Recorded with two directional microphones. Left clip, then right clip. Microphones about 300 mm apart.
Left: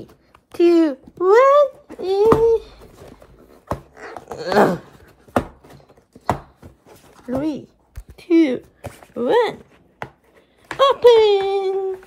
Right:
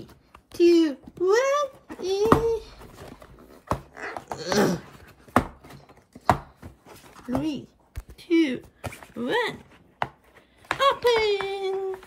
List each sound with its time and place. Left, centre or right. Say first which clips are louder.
0.6 s a child's voice: left 4 dB; centre
4.0 s wail: left 1 dB; centre
4.4 s speech: left 8 dB; centre
5.0 s a sound: left 1 dB; centre
7.2 s speech: left 5 dB; centre
8.2 s speech: left 7 dB; centre
8.5 s a sound: left 5 dB; centre
9.3 s chopping: left 9 dB; centre
10.7 s a child's voice: left 9 dB; centre